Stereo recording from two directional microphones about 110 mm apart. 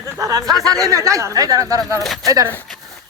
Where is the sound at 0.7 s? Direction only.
30° right (ahead or behind).